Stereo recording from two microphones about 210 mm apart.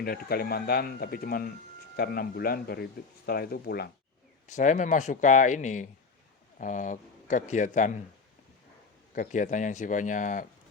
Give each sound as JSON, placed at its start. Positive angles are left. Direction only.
{"t": 0.0, "sound": "speech", "side_deg": 45}
{"t": 4.4, "sound": "speech", "side_deg": 35}
{"t": 9.1, "sound": "speech", "side_deg": 35}